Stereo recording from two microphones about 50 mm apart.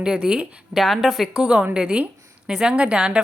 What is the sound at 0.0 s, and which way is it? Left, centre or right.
Speech, centre.